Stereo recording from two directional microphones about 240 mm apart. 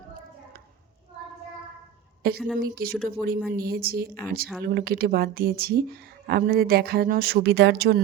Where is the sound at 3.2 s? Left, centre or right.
Centre.